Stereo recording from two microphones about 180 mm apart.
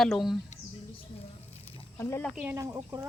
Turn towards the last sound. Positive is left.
turn(degrees=-15)  # may be behind; listen again after turning